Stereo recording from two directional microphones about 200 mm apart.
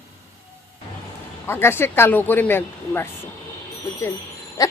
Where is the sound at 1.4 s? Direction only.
10° left (ahead or behind).